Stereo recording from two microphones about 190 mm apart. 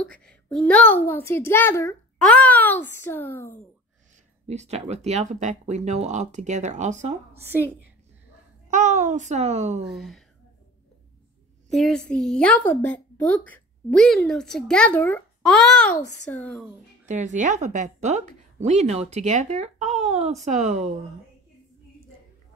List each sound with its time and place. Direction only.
0.0 s a child's voice: 5° left (ahead or behind)
4.5 s speech: 35° right (ahead or behind)
8.6 s speech: 40° right (ahead or behind)
9.8 s a woman's voice: centre (ahead or behind)
11.7 s a woman's voice: centre (ahead or behind)
17.0 s speech: 40° right (ahead or behind)